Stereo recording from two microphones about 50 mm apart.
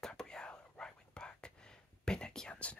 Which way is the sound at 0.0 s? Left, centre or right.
Centre.